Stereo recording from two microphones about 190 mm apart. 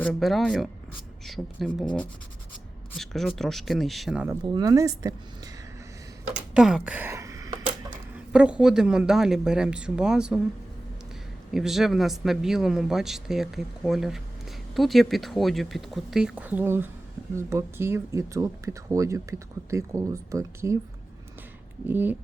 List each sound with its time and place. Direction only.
0.0 s speech: centre (ahead or behind)
4.3 s speech: 20° right (ahead or behind)
6.5 s speech: centre (ahead or behind)
8.1 s speech: 5° right (ahead or behind)
11.5 s speech: centre (ahead or behind)
21.8 s speech: 10° right (ahead or behind)